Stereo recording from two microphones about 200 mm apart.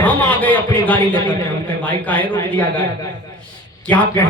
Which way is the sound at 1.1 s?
20° left (ahead or behind).